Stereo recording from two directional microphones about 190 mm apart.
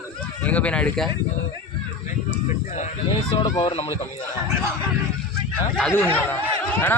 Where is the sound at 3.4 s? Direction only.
20° left (ahead or behind).